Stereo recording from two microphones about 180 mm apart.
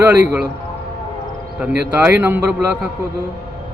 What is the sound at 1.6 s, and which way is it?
Speech, 10° right (ahead or behind).